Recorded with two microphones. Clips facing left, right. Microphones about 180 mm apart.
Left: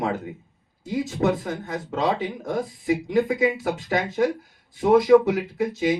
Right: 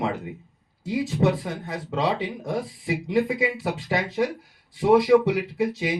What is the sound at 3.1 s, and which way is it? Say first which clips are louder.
Speech: left 1 dB; 50° left (ahead or behind).